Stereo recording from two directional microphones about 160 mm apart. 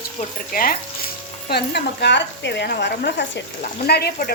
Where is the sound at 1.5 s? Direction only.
90° left.